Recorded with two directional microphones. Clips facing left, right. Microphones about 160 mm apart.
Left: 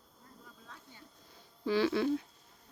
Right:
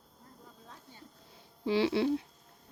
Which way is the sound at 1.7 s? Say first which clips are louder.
Right 1 dB; 25° right (ahead or behind).